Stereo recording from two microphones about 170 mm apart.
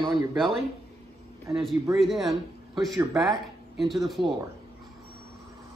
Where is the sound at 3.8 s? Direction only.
Centre (ahead or behind).